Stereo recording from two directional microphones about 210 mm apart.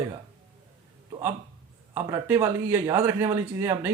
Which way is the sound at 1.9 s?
10° right (ahead or behind).